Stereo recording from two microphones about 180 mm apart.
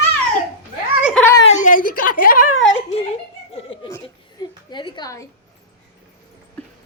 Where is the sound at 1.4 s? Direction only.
45° left (ahead or behind).